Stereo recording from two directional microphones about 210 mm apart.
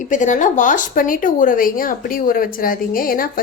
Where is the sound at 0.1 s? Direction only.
35° left (ahead or behind).